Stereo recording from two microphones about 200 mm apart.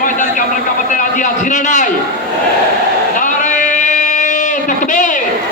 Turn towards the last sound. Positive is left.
turn(degrees=40)  # may be behind; listen again after turning